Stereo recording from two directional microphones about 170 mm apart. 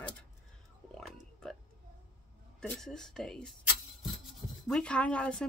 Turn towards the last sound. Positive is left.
turn(degrees=5)  # may be behind; listen again after turning